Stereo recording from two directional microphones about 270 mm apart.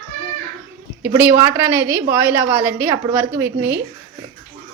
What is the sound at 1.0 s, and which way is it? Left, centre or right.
A woman's voice, centre.